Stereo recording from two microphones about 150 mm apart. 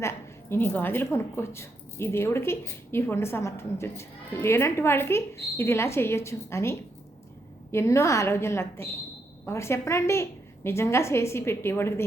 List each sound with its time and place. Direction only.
0.0 s a woman's voice: 15° left (ahead or behind)